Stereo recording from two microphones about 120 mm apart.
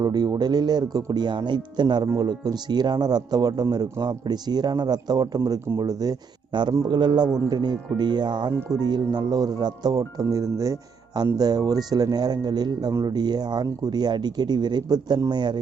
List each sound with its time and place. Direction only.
0.0 s speech: 35° right (ahead or behind)